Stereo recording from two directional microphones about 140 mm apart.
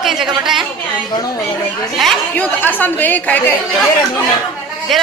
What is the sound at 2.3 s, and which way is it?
Speech, 10° left (ahead or behind).